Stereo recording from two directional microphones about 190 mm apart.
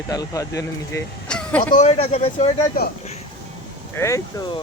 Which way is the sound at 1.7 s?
35° left (ahead or behind).